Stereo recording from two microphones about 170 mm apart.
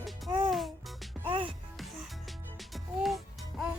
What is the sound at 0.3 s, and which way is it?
Music, 25° right (ahead or behind).